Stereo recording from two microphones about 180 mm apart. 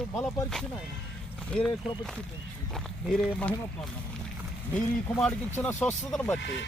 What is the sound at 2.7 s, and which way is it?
Speech, centre (ahead or behind).